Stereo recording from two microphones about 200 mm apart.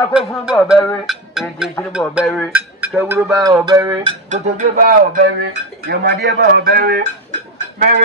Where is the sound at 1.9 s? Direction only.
5° right (ahead or behind).